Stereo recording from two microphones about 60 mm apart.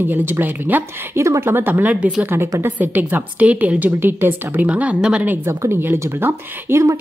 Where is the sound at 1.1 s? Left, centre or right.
Right.